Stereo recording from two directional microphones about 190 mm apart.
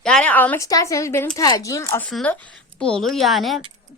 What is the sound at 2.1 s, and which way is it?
A woman's voice, 5° left (ahead or behind).